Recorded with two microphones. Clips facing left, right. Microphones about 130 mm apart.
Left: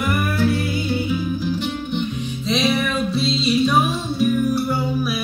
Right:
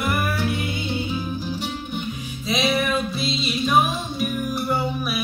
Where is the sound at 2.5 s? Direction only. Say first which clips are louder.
Left 2 dB; centre (ahead or behind).